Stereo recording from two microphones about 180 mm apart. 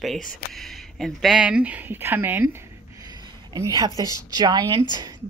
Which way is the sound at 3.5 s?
20° right (ahead or behind).